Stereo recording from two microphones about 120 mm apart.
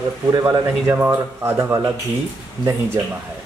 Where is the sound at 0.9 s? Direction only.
20° right (ahead or behind).